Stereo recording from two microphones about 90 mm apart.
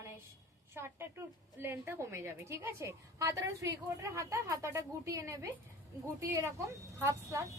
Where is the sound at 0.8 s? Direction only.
30° right (ahead or behind).